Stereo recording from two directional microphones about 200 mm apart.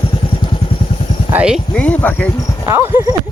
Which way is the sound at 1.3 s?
5° right (ahead or behind).